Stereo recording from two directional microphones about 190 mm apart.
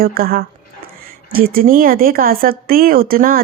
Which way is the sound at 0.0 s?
50° right (ahead or behind).